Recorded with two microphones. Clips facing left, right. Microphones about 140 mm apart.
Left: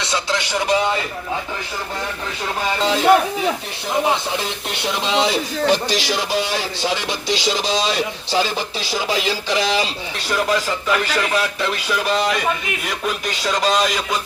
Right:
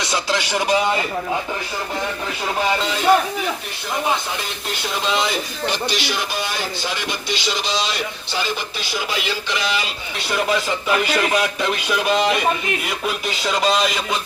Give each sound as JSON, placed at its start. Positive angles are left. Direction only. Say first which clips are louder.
{"t": 5.0, "sound": "speech", "louder": "left 3 dB", "side_deg": 30}
{"t": 8.9, "sound": "speech", "louder": "left 4 dB", "side_deg": 30}
{"t": 10.3, "sound": "music", "louder": "left 1 dB", "side_deg": -5}